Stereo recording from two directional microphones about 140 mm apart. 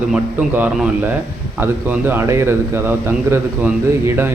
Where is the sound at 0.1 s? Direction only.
10° right (ahead or behind).